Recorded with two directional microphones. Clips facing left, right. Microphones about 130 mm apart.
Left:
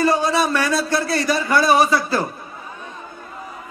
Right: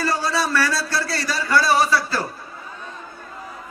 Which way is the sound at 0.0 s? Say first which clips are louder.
Left 5 dB; 20° left (ahead or behind).